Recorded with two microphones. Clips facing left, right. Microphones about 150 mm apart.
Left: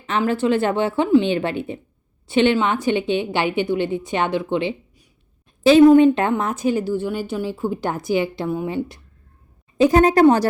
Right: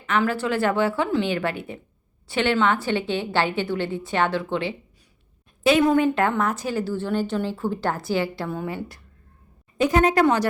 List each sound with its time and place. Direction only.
0.0 s a woman's voice: 25° left (ahead or behind)
5.9 s a woman's voice: 20° left (ahead or behind)
9.7 s a woman's voice: 35° left (ahead or behind)